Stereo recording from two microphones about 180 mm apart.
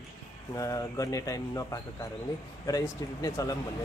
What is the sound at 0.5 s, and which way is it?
A man's voice, 20° left (ahead or behind).